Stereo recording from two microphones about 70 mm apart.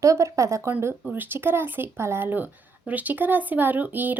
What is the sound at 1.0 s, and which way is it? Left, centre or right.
Speech, right.